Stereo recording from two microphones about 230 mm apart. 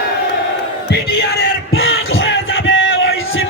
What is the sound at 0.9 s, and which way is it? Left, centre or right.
Music, left.